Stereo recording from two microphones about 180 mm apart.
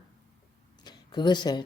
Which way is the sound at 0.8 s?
25° left (ahead or behind).